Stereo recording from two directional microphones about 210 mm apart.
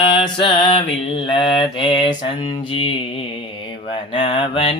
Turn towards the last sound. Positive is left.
turn(degrees=25)  # may be behind; listen again after turning